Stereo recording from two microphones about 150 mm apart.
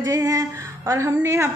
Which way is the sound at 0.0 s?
25° right (ahead or behind).